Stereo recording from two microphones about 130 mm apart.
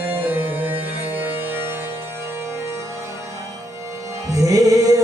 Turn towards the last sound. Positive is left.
turn(degrees=-25)  # may be behind; listen again after turning